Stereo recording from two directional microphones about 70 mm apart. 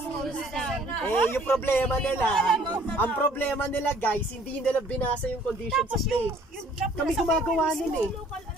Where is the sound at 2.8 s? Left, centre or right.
Left.